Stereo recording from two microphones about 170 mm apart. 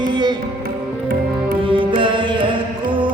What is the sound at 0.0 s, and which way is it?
Music, 25° right (ahead or behind).